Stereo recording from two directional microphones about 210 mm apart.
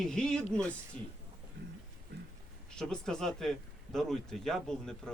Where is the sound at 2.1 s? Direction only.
50° right (ahead or behind).